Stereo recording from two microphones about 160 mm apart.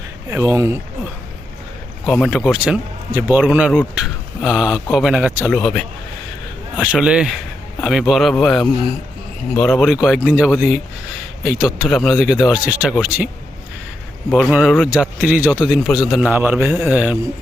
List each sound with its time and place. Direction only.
0.3 s speech: 15° right (ahead or behind)
2.0 s speech: centre (ahead or behind)
6.7 s speech: 5° right (ahead or behind)
14.3 s speech: 5° right (ahead or behind)
16.3 s speech: 10° right (ahead or behind)